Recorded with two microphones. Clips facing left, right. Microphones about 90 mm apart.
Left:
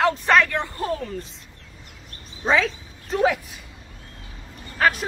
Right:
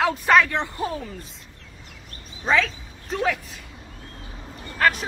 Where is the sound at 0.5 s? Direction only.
20° right (ahead or behind).